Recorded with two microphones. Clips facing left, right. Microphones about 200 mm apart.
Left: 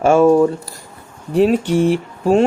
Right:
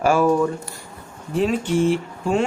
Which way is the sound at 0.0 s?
25° left (ahead or behind).